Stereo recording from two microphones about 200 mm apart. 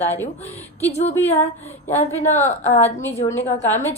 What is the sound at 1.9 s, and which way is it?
Child singing, 35° left (ahead or behind).